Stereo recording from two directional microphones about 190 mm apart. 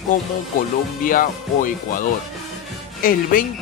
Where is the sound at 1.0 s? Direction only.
45° left (ahead or behind).